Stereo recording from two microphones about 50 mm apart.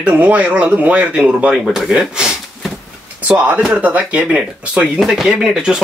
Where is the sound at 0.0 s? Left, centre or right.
Right.